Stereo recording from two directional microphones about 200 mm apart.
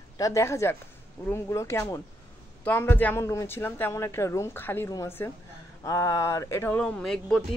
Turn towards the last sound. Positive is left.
turn(degrees=5)  # may be behind; listen again after turning